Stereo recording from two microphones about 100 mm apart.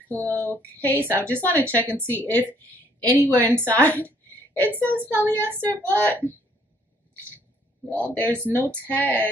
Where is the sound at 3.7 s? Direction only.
15° left (ahead or behind).